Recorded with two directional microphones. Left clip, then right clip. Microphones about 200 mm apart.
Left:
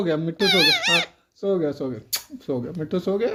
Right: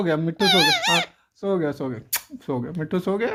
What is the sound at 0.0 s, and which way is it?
Speech, 35° right (ahead or behind).